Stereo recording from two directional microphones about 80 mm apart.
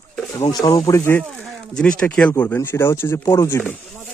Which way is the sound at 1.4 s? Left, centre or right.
Centre.